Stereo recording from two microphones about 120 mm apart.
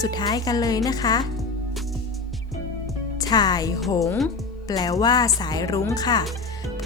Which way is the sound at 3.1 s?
35° left (ahead or behind).